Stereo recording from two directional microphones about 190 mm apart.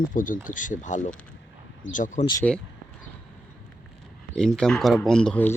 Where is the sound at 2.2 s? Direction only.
20° left (ahead or behind).